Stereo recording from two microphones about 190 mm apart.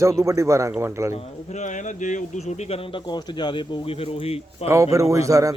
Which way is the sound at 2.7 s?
20° left (ahead or behind).